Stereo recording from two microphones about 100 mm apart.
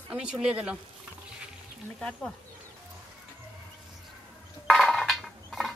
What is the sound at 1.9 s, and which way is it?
Speech, 5° left (ahead or behind).